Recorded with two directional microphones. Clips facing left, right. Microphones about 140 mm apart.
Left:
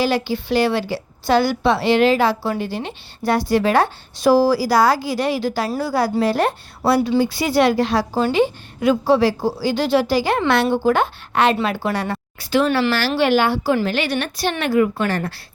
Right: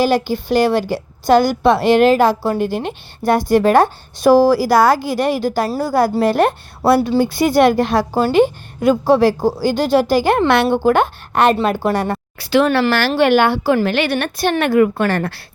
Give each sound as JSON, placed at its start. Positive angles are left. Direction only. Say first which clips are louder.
{"t": 0.0, "sound": "a woman's voice", "louder": "right 4 dB", "side_deg": -45}
{"t": 12.4, "sound": "speech", "louder": "right 3 dB", "side_deg": -75}
{"t": 12.9, "sound": "a woman's voice", "louder": "right 4 dB", "side_deg": -55}